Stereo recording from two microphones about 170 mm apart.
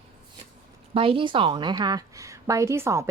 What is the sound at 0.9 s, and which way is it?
A woman's voice, 30° right (ahead or behind).